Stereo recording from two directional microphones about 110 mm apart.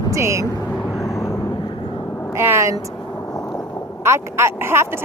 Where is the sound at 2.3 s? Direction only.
25° right (ahead or behind).